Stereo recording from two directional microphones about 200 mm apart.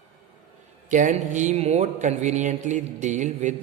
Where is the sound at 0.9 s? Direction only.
40° right (ahead or behind).